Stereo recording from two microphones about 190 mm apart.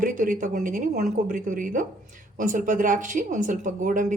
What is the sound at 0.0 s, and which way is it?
Speech, 45° right (ahead or behind).